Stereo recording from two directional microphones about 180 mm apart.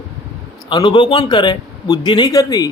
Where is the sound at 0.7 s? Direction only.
25° left (ahead or behind).